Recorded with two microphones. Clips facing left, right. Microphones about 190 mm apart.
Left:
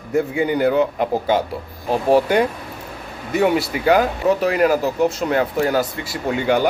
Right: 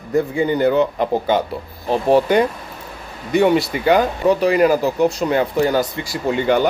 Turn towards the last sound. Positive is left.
turn(degrees=10)  # may be behind; listen again after turning